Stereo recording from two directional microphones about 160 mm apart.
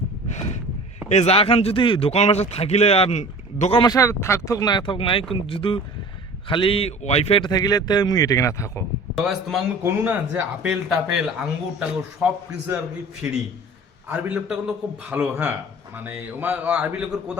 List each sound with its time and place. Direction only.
1.0 s a man's voice: 45° left (ahead or behind)
3.8 s a man's voice: 20° left (ahead or behind)
9.1 s a man's voice: centre (ahead or behind)
9.8 s speech: 15° right (ahead or behind)